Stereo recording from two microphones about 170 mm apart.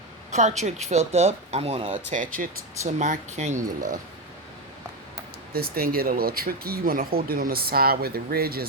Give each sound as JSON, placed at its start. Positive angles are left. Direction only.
{"t": 0.3, "sound": "speech", "side_deg": -45}
{"t": 2.0, "sound": "speech", "side_deg": -50}
{"t": 5.5, "sound": "speech", "side_deg": -65}